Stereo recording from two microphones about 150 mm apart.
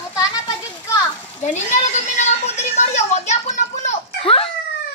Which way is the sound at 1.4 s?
50° left (ahead or behind).